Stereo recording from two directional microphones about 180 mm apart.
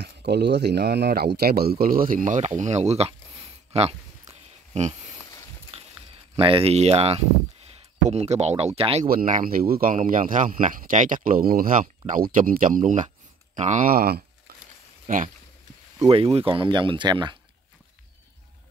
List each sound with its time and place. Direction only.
0.0 s speech: 65° right (ahead or behind); by 3.2 s 35° right (ahead or behind)
3.7 s a sound: 35° right (ahead or behind)
6.3 s speech: 30° right (ahead or behind)
9.0 s speech: 50° right (ahead or behind)
16.0 s speech: 30° right (ahead or behind)